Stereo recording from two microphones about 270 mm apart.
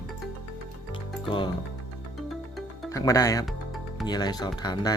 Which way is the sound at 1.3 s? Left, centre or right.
Centre.